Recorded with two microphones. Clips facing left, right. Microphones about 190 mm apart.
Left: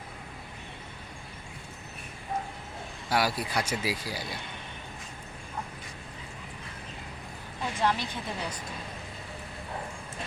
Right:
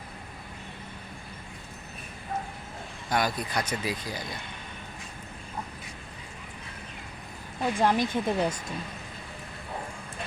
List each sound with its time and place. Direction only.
3.1 s speech: 10° left (ahead or behind)
7.8 s speech: 50° right (ahead or behind)